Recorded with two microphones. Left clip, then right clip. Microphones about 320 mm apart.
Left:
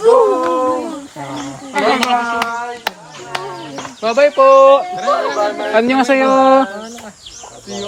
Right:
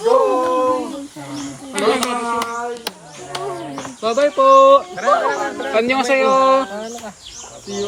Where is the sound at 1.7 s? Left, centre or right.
Centre.